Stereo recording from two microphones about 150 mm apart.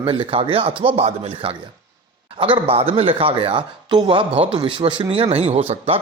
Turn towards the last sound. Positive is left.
turn(degrees=-40)  # may be behind; listen again after turning